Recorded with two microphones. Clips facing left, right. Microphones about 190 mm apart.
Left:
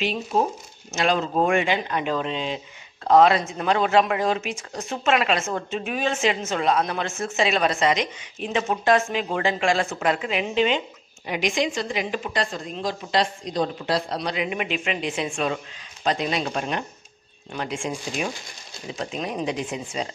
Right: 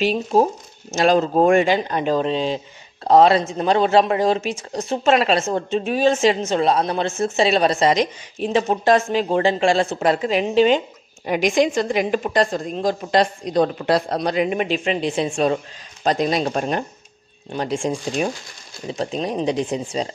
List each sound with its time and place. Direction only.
0.0 s a woman's voice: 40° right (ahead or behind)